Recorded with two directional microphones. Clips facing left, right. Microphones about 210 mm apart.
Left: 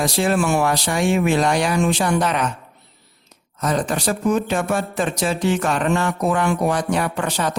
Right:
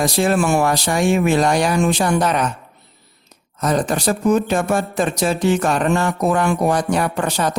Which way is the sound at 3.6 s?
40° right (ahead or behind).